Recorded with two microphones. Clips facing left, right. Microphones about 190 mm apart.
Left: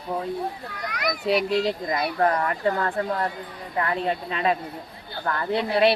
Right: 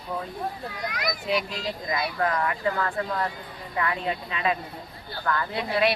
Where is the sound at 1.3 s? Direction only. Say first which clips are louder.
Left 8 dB; 35° left (ahead or behind).